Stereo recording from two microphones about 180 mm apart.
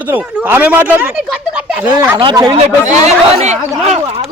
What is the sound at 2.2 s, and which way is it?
Speech, 25° right (ahead or behind).